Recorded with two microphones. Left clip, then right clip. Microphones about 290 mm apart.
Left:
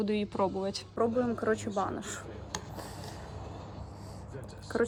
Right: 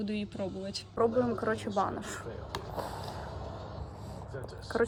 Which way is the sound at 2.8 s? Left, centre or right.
Centre.